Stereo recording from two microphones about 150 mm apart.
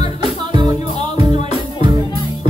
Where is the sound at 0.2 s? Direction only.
30° right (ahead or behind).